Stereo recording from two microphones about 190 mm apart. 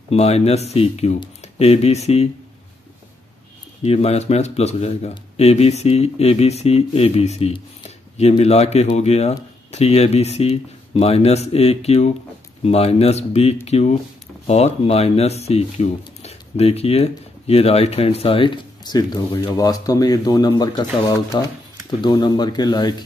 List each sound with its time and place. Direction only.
0.1 s speech: 35° left (ahead or behind)
3.8 s speech: 35° left (ahead or behind)